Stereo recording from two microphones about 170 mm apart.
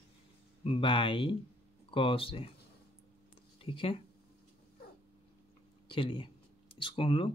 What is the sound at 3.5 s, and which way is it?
Speech, 30° left (ahead or behind).